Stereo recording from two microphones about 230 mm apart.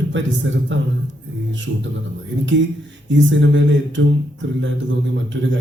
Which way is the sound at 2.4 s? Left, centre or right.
Right.